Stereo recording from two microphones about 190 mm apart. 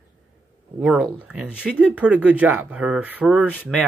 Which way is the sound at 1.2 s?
5° right (ahead or behind).